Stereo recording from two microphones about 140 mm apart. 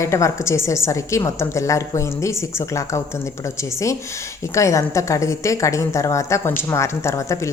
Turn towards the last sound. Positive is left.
turn(degrees=20)  # may be behind; listen again after turning